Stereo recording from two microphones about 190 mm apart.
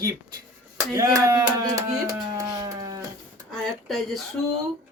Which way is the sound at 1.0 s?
20° right (ahead or behind).